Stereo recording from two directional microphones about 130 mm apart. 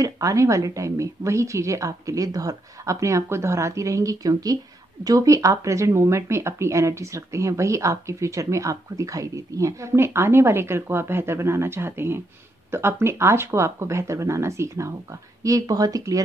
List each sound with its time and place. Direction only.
0.0 s speech: 25° right (ahead or behind)